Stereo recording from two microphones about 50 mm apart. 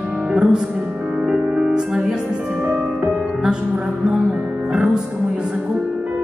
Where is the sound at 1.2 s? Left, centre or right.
Centre.